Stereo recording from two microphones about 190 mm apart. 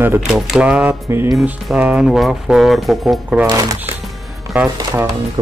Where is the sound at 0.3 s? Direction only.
5° right (ahead or behind).